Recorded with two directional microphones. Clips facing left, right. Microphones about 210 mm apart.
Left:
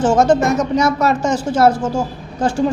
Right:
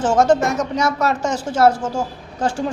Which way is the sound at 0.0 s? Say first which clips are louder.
Left 2 dB; 5° left (ahead or behind).